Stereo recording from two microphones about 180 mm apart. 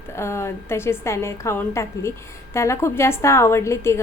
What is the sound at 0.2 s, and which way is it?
A woman's voice, 15° left (ahead or behind).